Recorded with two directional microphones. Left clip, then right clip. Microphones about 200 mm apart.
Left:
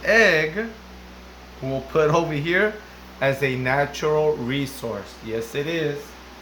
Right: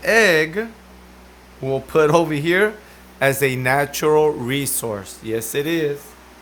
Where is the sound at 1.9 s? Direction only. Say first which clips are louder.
Right 4 dB; 50° right (ahead or behind).